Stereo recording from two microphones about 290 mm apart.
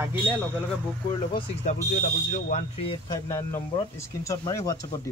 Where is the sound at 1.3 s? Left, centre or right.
Left.